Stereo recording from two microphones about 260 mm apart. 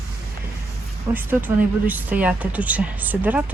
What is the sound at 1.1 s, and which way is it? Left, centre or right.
Speech, centre.